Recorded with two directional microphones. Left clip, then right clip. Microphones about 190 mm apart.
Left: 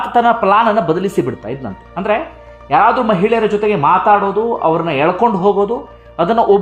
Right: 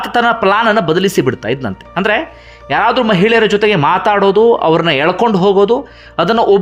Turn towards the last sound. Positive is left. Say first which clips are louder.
# right 1 dB
turn(degrees=-15)  # may be behind; listen again after turning